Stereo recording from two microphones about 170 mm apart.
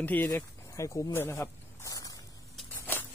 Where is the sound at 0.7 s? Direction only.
20° left (ahead or behind).